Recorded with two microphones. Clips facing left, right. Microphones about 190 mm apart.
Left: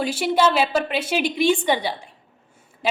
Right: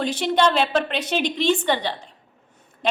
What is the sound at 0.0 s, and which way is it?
A woman's voice, 10° left (ahead or behind).